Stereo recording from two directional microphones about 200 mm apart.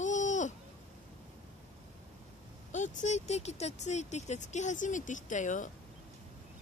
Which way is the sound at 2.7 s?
35° left (ahead or behind).